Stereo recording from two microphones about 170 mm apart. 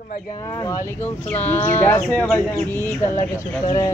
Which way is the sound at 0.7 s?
10° left (ahead or behind).